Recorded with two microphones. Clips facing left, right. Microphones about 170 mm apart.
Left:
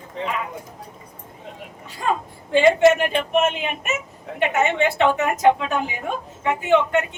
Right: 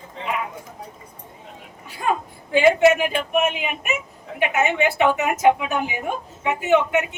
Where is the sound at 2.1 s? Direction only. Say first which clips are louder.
Even; 10° right (ahead or behind).